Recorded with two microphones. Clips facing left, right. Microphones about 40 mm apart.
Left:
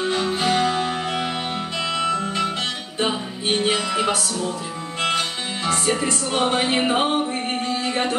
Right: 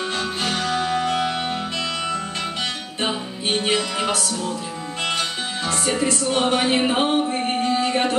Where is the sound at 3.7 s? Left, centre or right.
Left.